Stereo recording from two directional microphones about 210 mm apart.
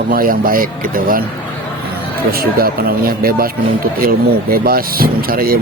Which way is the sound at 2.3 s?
45° right (ahead or behind).